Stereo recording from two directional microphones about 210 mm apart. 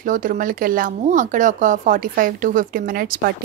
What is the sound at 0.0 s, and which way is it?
Speech, 40° right (ahead or behind).